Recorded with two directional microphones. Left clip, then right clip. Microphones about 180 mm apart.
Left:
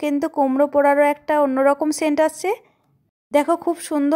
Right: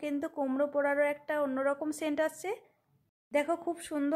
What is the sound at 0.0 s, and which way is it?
A woman's voice, 30° left (ahead or behind).